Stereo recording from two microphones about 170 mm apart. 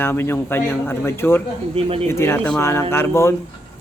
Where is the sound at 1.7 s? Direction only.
35° right (ahead or behind).